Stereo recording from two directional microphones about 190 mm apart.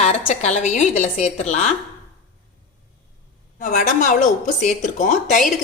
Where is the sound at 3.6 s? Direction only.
40° left (ahead or behind).